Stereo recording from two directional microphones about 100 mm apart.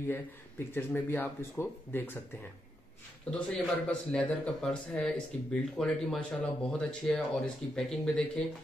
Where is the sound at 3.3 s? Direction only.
10° left (ahead or behind).